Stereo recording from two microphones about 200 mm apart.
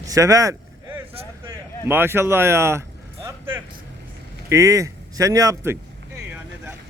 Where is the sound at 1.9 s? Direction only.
10° right (ahead or behind).